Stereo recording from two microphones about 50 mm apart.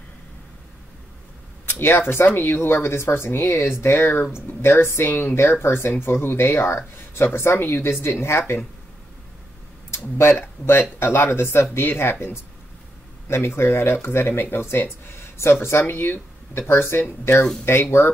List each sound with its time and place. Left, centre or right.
1.8 s speech: left
9.8 s a sound: left
10.8 s speech: left
13.6 s speech: left